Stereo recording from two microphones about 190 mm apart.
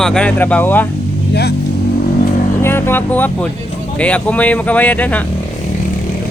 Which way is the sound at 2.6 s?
10° left (ahead or behind).